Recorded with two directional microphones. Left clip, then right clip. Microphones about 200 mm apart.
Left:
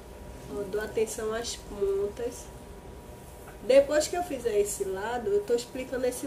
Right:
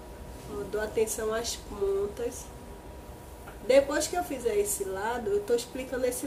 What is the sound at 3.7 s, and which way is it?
A woman's voice, 10° left (ahead or behind).